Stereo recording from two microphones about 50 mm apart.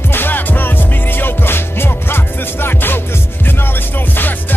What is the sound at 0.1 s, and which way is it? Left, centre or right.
Music, left.